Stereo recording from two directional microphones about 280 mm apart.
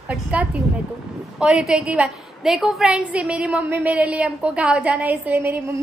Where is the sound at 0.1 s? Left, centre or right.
Centre.